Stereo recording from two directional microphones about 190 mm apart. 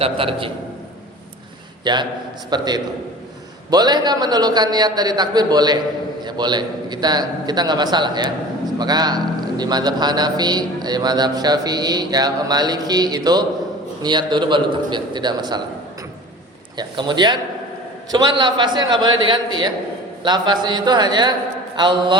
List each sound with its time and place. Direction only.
0.0 s a man's voice: 30° right (ahead or behind)
1.8 s a man's voice: 25° right (ahead or behind)
16.7 s a man's voice: 25° right (ahead or behind)